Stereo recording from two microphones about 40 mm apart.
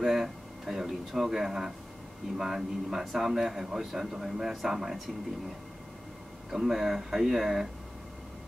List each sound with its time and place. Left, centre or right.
0.0 s speech: centre
6.5 s speech: centre